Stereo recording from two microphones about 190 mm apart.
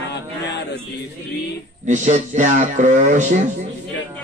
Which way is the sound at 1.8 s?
40° right (ahead or behind).